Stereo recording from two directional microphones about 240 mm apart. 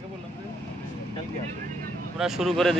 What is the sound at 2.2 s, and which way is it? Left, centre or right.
Speech, centre.